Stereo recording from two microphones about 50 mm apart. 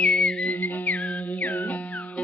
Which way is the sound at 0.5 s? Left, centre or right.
Left.